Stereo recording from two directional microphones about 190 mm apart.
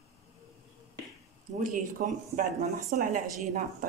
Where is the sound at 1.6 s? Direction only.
45° right (ahead or behind).